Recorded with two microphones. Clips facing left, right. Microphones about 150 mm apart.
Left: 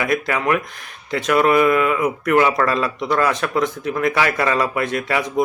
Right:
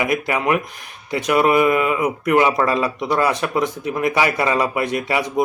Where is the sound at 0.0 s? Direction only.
15° right (ahead or behind).